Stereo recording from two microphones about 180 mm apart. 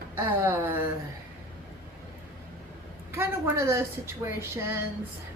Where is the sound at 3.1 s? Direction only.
15° right (ahead or behind).